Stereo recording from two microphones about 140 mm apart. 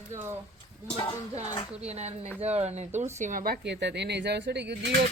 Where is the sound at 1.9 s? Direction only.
50° right (ahead or behind).